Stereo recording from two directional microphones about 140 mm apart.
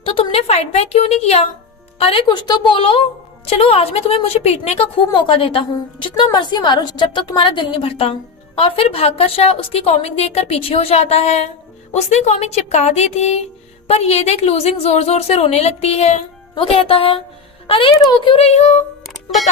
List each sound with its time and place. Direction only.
0.0 s a woman's voice: 40° left (ahead or behind)
2.2 s a woman's voice: 30° left (ahead or behind); by 18.8 s 50° left (ahead or behind)
19.0 s music: centre (ahead or behind)